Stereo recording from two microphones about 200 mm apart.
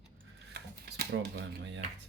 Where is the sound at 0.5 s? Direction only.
55° right (ahead or behind).